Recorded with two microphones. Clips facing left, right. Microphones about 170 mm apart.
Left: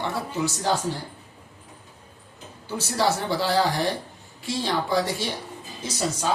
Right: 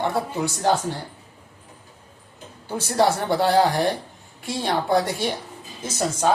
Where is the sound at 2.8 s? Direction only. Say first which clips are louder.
Right 4 dB; 55° right (ahead or behind).